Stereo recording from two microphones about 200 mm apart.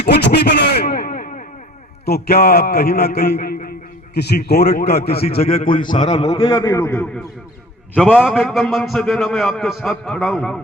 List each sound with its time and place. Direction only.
0.1 s a sound: 55° left (ahead or behind)
2.0 s a man's voice: 50° left (ahead or behind)
5.6 s a man's voice: 25° left (ahead or behind); by 7.1 s 10° left (ahead or behind)
8.0 s a man's voice: 5° right (ahead or behind)